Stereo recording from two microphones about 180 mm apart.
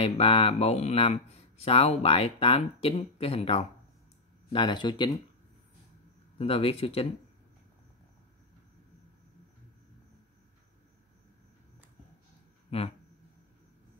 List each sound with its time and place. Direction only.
0.0 s speech: 30° left (ahead or behind)
6.3 s speech: 30° left (ahead or behind)